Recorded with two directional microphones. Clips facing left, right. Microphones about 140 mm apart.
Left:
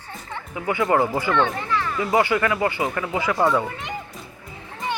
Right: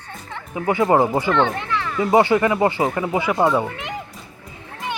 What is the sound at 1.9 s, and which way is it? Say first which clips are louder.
Speech: right 6 dB; 25° right (ahead or behind).